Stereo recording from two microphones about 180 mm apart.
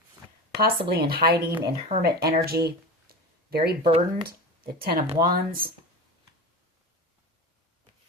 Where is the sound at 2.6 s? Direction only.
60° right (ahead or behind).